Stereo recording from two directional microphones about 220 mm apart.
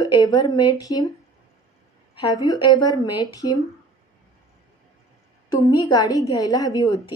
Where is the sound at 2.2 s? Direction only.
15° left (ahead or behind).